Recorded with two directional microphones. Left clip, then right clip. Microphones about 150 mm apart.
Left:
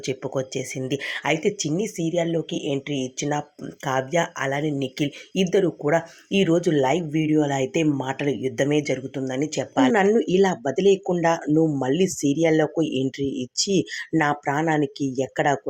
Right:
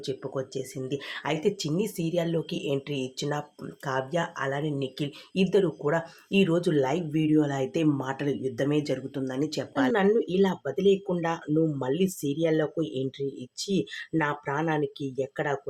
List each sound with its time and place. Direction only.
0.0 s speech: 30° left (ahead or behind)
14.2 s speech: 30° left (ahead or behind)